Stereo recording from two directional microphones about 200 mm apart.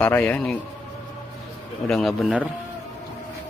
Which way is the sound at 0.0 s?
10° left (ahead or behind).